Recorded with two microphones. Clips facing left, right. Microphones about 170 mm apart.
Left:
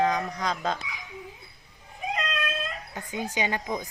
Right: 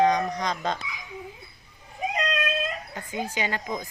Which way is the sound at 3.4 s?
15° left (ahead or behind).